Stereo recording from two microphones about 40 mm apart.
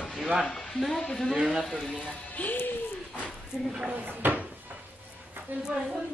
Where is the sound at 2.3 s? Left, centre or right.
Left.